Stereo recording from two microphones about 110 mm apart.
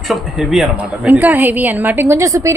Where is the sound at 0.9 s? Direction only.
15° right (ahead or behind).